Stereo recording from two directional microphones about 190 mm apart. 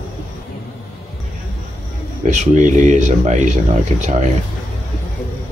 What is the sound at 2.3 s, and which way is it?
Speech, 40° right (ahead or behind).